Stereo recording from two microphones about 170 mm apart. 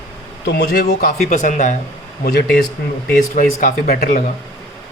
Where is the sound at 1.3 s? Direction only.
45° left (ahead or behind).